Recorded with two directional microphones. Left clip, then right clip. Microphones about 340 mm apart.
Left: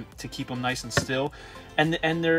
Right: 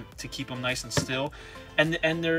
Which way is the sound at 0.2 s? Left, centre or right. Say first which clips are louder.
Left 2 dB; centre.